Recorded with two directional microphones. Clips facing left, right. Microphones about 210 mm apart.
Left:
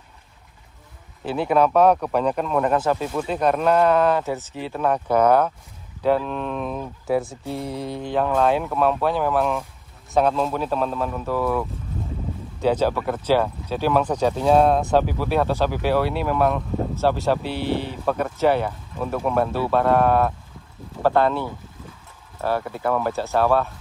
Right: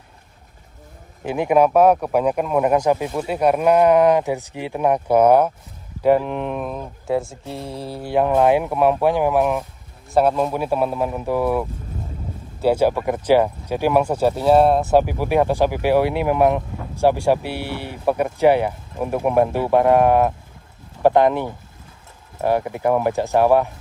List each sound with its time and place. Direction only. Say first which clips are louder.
1.2 s speech: right 3 dB; 15° right (ahead or behind)
6.6 s speech: even; centre (ahead or behind)
12.6 s speech: right 3 dB; 10° right (ahead or behind)